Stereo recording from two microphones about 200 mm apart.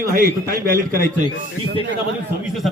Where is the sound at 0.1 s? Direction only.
45° right (ahead or behind).